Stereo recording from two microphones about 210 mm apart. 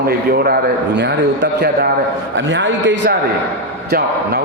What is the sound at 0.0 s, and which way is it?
A man's voice, 45° right (ahead or behind).